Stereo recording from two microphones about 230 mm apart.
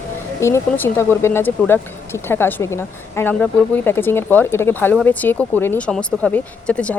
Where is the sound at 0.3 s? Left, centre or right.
Centre.